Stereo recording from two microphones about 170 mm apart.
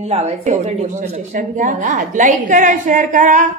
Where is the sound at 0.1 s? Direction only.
40° right (ahead or behind).